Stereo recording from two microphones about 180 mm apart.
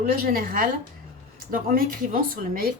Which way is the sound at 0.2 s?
55° right (ahead or behind).